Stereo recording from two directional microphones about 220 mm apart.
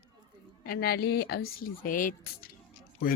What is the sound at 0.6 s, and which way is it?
Speech, 45° left (ahead or behind).